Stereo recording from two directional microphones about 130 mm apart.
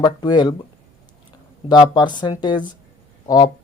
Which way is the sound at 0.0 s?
35° left (ahead or behind).